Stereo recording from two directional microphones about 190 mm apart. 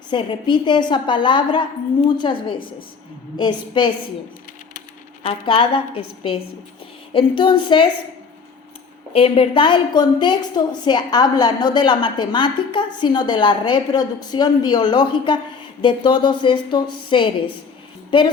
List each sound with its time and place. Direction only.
0.1 s a woman's voice: 25° left (ahead or behind)
5.2 s a woman's voice: 30° left (ahead or behind)
9.1 s a woman's voice: 30° left (ahead or behind)